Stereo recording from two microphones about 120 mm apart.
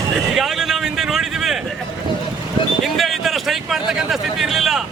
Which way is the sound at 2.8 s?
Centre (ahead or behind).